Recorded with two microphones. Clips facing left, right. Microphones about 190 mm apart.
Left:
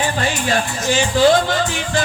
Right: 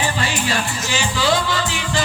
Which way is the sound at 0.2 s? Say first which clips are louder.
Left 3 dB; 50° left (ahead or behind).